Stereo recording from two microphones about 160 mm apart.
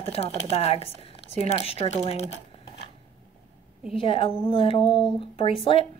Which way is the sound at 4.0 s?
35° left (ahead or behind).